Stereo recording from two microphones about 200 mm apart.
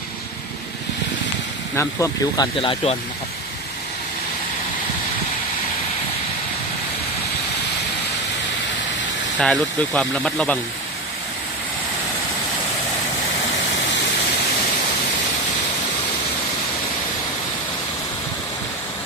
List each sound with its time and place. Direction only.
1.7 s speech: 15° left (ahead or behind)
9.4 s speech: 5° left (ahead or behind)